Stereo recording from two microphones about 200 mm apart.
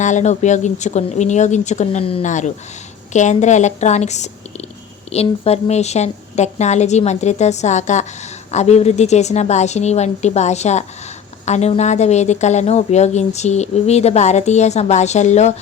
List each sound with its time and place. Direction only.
0.0 s a woman's voice: 35° left (ahead or behind)